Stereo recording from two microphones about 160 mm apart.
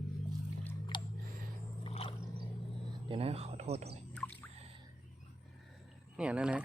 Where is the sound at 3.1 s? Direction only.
35° right (ahead or behind).